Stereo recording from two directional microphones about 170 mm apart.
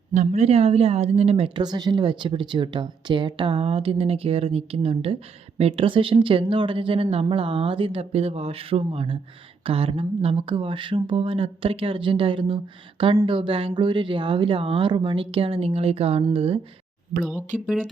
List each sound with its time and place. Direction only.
0.1 s speech: 40° right (ahead or behind)